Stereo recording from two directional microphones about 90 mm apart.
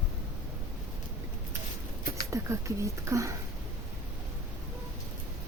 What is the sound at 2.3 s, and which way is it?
Speech, 35° right (ahead or behind).